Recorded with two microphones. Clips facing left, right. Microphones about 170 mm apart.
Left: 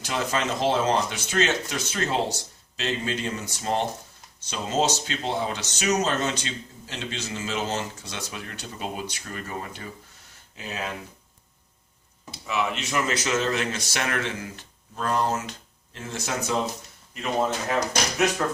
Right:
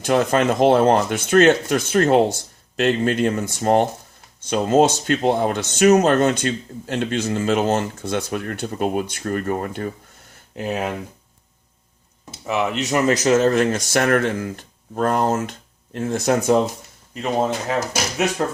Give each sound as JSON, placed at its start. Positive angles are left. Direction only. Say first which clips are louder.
{"t": 0.0, "sound": "speech", "louder": "right 10 dB", "side_deg": -55}
{"t": 12.5, "sound": "speech", "louder": "right 6 dB", "side_deg": -40}
{"t": 18.4, "sound": "speech", "louder": "right 4 dB", "side_deg": -35}